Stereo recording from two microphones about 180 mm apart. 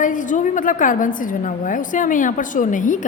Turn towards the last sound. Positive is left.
turn(degrees=45)  # may be behind; listen again after turning